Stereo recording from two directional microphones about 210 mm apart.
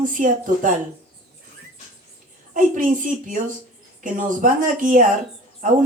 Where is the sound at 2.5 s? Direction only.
40° right (ahead or behind).